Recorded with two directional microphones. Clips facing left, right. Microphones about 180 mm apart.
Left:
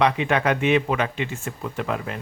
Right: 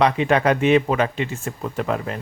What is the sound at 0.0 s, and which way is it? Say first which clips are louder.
Speech: right 3 dB; 35° right (ahead or behind).